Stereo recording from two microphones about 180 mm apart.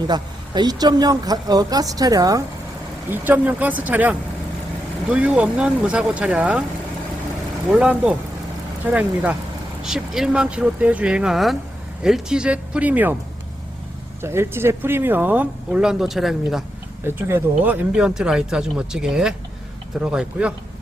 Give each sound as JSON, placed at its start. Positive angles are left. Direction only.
{"t": 0.1, "sound": "speech", "side_deg": -25}
{"t": 7.7, "sound": "speech", "side_deg": -5}
{"t": 14.2, "sound": "speech", "side_deg": -15}
{"t": 17.2, "sound": "speech", "side_deg": -15}